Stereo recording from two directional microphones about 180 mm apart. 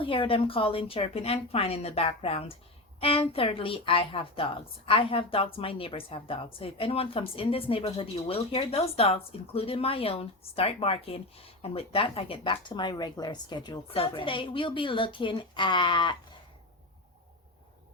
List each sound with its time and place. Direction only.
0.0 s speech: 30° left (ahead or behind)